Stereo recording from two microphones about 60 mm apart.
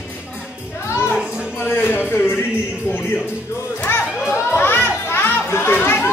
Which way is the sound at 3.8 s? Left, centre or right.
Left.